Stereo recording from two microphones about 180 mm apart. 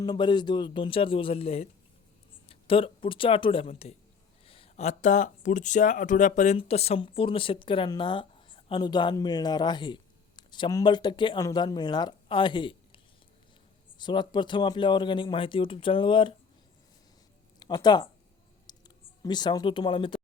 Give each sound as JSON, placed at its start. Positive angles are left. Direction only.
{"t": 0.0, "sound": "speech", "side_deg": 25}
{"t": 14.0, "sound": "speech", "side_deg": 25}
{"t": 17.6, "sound": "speech", "side_deg": 25}
{"t": 18.7, "sound": "clicking", "side_deg": 20}
{"t": 19.2, "sound": "speech", "side_deg": 25}